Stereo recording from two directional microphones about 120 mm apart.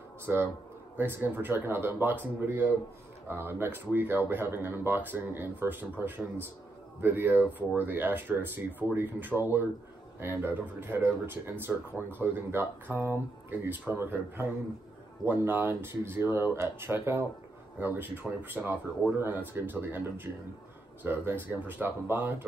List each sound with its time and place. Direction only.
0.3 s speech: 15° right (ahead or behind)